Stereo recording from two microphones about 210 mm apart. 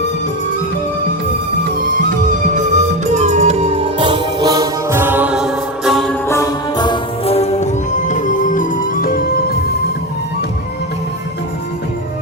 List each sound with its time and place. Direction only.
2.6 s music: 35° right (ahead or behind); by 6.1 s centre (ahead or behind)
6.2 s music: 15° left (ahead or behind); by 9.6 s 45° left (ahead or behind)